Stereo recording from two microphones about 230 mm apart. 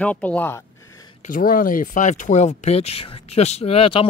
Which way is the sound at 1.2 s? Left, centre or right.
Left.